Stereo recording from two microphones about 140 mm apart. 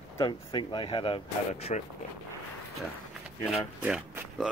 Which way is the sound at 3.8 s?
5° right (ahead or behind).